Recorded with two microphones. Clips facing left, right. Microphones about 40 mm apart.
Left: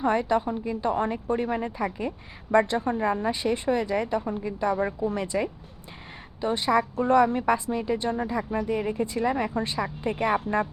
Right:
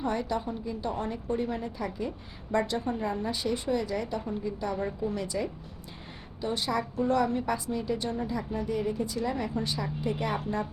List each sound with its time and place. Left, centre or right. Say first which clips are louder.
0.0 s a woman's voice: left 7 dB; left
6.9 s a woman's voice: left 3 dB; left